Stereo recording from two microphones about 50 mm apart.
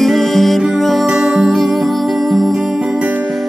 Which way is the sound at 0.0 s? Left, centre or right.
Centre.